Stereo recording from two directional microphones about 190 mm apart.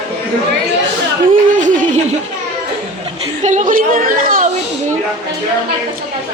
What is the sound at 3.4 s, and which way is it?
Speech, 40° right (ahead or behind).